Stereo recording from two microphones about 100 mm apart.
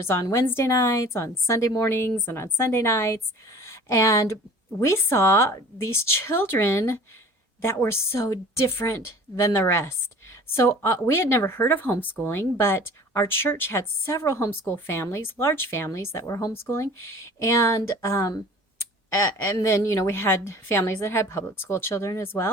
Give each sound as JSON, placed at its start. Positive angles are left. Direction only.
{"t": 0.0, "sound": "a woman's voice", "side_deg": 25}
{"t": 19.6, "sound": "a woman's voice", "side_deg": 30}